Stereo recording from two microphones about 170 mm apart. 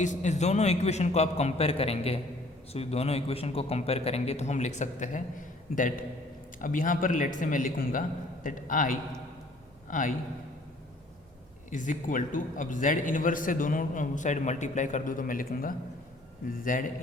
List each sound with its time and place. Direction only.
0.0 s a man's voice: 45° left (ahead or behind)
11.7 s a man's voice: 50° left (ahead or behind)